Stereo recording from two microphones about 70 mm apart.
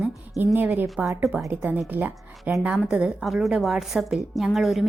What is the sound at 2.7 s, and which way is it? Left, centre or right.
A woman's voice, centre.